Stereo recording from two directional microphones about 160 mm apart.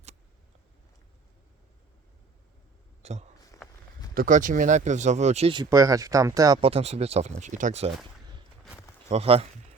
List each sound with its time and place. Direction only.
3.0 s speech: 45° right (ahead or behind)
3.5 s walk: 20° left (ahead or behind)
4.1 s speech: 60° right (ahead or behind); by 5.5 s 40° right (ahead or behind)
5.5 s speech: 20° right (ahead or behind)
6.6 s speech: 35° right (ahead or behind)
9.0 s speech: 40° right (ahead or behind)